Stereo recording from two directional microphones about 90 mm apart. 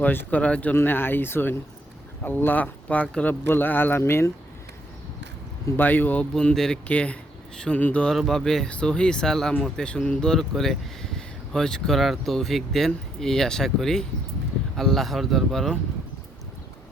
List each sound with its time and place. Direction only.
0.0 s speech: 20° left (ahead or behind)
5.7 s speech: 20° left (ahead or behind)
6.3 s speech: 5° left (ahead or behind)
8.0 s speech: 5° left (ahead or behind)